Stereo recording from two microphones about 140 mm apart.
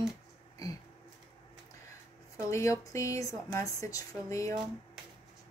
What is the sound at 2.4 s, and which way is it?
Speech, 20° left (ahead or behind).